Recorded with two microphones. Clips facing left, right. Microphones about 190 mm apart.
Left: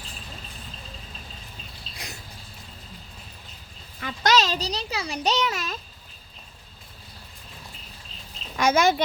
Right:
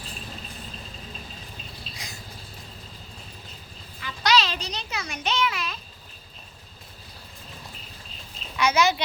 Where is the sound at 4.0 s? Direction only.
50° left (ahead or behind).